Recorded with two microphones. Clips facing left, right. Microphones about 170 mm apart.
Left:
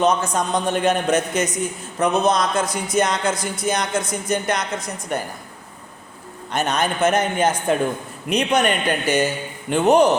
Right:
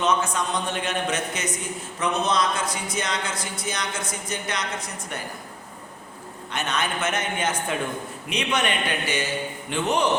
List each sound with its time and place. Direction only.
0.0 s a man's voice: 40° left (ahead or behind)
6.5 s a man's voice: 40° left (ahead or behind)